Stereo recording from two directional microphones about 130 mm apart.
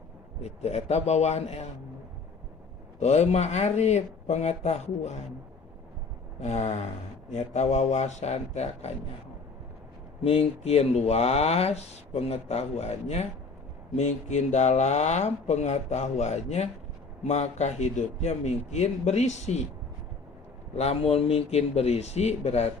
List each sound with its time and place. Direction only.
0.4 s speech: 55° left (ahead or behind)
3.0 s speech: 55° left (ahead or behind)
6.4 s speech: 60° left (ahead or behind)
10.2 s speech: 50° left (ahead or behind)
20.7 s speech: 50° left (ahead or behind)